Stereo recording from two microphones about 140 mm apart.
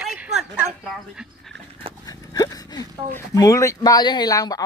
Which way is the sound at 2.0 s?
25° left (ahead or behind).